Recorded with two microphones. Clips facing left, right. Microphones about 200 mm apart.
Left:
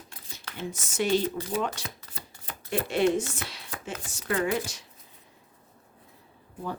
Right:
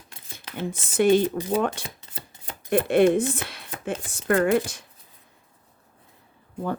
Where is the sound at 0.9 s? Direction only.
55° right (ahead or behind).